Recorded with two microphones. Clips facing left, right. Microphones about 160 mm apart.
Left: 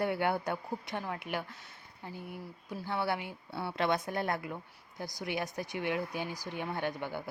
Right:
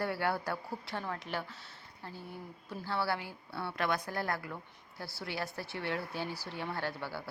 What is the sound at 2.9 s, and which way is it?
A woman's voice, 20° left (ahead or behind).